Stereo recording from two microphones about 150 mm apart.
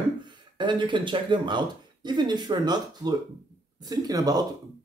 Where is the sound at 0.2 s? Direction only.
30° right (ahead or behind).